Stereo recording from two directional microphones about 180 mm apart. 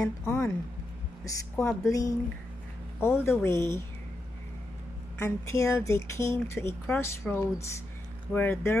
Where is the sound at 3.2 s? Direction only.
15° left (ahead or behind).